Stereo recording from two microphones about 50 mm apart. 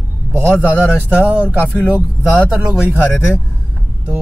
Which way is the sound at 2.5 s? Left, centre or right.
Centre.